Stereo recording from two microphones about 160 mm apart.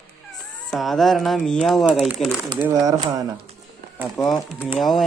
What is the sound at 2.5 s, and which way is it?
Speech, 25° right (ahead or behind).